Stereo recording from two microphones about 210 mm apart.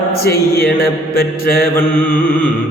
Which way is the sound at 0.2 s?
45° left (ahead or behind).